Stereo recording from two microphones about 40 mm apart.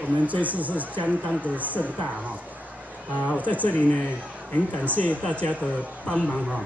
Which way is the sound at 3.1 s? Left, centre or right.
Right.